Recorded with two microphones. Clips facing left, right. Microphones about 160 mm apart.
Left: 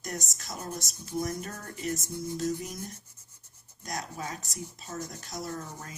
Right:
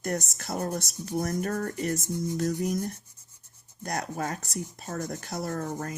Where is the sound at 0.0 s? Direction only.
55° right (ahead or behind).